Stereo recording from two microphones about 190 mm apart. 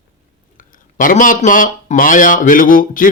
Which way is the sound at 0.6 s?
45° left (ahead or behind).